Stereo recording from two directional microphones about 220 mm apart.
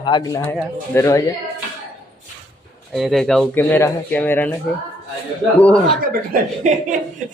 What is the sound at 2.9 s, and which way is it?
Speech, centre (ahead or behind).